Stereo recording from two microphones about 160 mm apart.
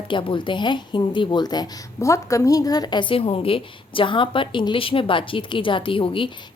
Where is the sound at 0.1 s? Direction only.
30° left (ahead or behind).